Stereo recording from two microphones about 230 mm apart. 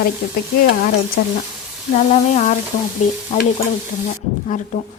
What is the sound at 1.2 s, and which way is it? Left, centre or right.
Speech, left.